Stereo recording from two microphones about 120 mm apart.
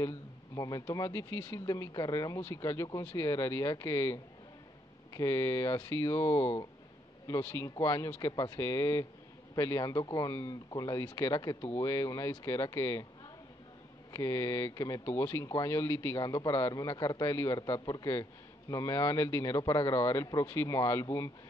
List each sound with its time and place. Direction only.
0.6 s speech: 30° left (ahead or behind)
14.1 s speech: 25° left (ahead or behind)
16.2 s a man's voice: 30° left (ahead or behind)
17.6 s a man's voice: 35° left (ahead or behind)